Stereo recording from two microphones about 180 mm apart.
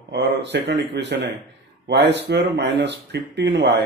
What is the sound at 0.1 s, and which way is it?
Speech, 75° right (ahead or behind).